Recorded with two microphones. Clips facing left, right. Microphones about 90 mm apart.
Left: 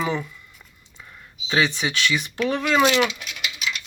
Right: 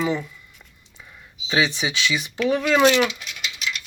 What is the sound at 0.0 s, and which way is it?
Speech, 5° left (ahead or behind).